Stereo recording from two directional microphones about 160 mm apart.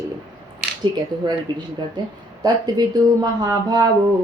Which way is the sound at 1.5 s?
25° right (ahead or behind).